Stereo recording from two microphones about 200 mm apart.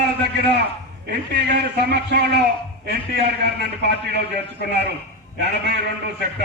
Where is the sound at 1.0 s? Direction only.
55° right (ahead or behind).